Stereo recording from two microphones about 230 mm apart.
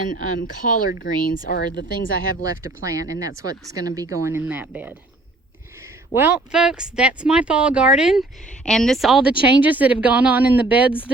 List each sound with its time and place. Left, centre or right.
0.4 s speech: left
2.4 s speech: centre
6.1 s speech: centre